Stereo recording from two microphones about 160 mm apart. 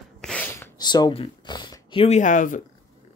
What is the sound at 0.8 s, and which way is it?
Speech, 25° left (ahead or behind).